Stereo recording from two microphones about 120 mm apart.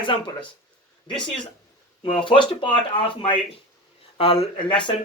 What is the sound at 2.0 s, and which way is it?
Speech, 45° left (ahead or behind).